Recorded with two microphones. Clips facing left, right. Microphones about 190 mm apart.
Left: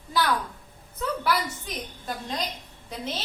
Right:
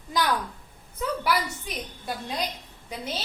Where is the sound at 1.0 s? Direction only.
10° right (ahead or behind).